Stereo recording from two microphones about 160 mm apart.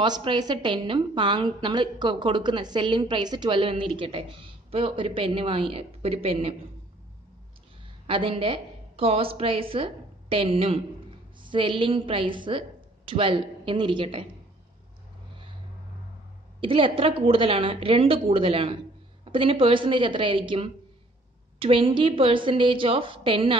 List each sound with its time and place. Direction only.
0.0 s a woman's voice: 30° right (ahead or behind)
8.1 s a woman's voice: 35° right (ahead or behind)
16.6 s a woman's voice: 35° right (ahead or behind)